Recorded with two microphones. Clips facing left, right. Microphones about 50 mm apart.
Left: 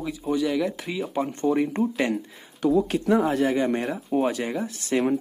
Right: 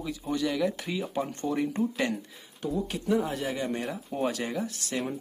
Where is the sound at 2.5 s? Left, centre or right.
Left.